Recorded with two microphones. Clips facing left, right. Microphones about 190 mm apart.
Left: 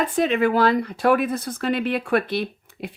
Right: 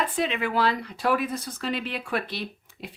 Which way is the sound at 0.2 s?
45° left (ahead or behind).